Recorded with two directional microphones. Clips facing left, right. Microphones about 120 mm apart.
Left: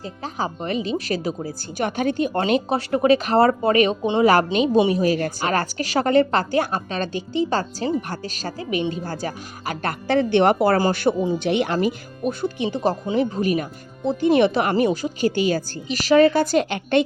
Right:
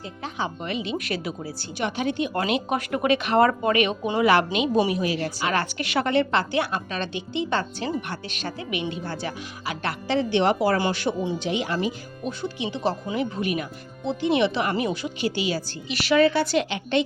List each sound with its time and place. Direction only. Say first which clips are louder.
0.0 s a woman's voice: left 3 dB; 40° left (ahead or behind)
5.0 s a woman's voice: left 5 dB; 45° left (ahead or behind)
10.8 s a woman's voice: left 5 dB; 45° left (ahead or behind)
11.3 s a woman's voice: left 5 dB; 60° left (ahead or behind)